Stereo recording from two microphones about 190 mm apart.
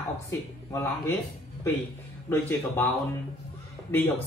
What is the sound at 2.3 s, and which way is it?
A woman's voice, 10° left (ahead or behind).